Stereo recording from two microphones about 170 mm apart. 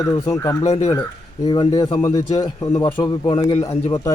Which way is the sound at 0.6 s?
40° left (ahead or behind).